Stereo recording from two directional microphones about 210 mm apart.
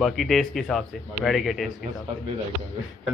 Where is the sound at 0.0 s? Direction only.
Centre (ahead or behind).